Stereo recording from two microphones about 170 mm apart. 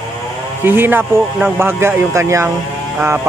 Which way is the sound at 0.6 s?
10° right (ahead or behind).